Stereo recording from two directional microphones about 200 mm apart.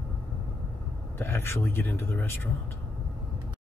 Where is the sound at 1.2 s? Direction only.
10° left (ahead or behind).